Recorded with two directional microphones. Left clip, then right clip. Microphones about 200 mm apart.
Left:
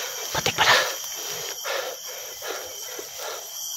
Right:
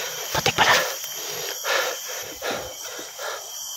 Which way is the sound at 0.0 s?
15° right (ahead or behind).